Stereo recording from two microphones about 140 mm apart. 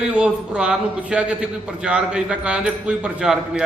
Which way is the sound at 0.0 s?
5° right (ahead or behind).